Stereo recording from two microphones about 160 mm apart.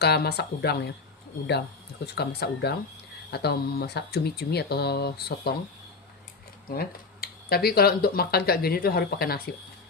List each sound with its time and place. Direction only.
0.0 s speech: 90° left
2.1 s speech: 90° left
6.7 s speech: 75° left (ahead or behind)